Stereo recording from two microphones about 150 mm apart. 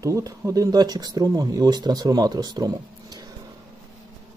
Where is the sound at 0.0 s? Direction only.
20° right (ahead or behind).